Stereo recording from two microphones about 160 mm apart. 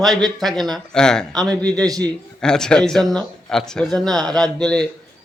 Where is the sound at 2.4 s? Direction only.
5° left (ahead or behind).